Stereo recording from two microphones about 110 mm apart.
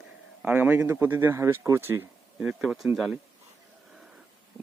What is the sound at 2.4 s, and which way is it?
Speech, 5° right (ahead or behind).